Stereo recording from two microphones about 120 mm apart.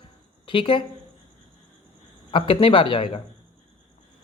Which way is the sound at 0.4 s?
45° left (ahead or behind).